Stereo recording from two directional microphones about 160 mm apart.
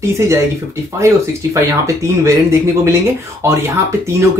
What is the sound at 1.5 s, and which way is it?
Speech, 20° right (ahead or behind).